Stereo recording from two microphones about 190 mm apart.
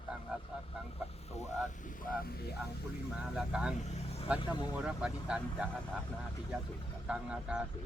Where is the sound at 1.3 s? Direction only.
35° left (ahead or behind).